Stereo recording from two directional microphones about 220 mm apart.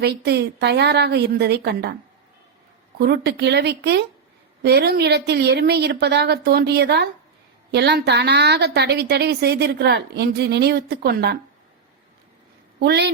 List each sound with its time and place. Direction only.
0.0 s a woman's voice: 45° right (ahead or behind)
3.0 s a woman's voice: 50° right (ahead or behind)
12.8 s a woman's voice: 50° right (ahead or behind)